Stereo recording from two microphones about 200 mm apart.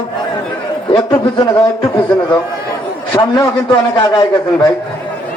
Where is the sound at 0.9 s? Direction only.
25° left (ahead or behind).